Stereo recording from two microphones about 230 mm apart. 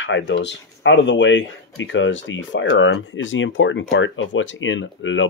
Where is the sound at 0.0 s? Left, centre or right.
Left.